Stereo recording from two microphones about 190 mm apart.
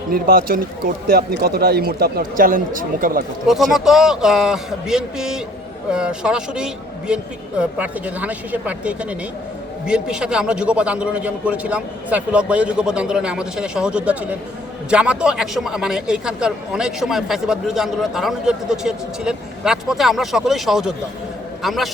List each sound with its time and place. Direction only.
0.1 s speech: 50° right (ahead or behind)
3.4 s a man's voice: centre (ahead or behind)